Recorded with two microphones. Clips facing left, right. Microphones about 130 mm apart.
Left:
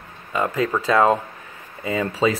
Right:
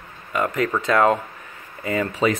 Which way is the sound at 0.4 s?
10° left (ahead or behind).